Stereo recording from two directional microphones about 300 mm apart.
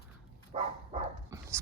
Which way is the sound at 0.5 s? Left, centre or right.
Right.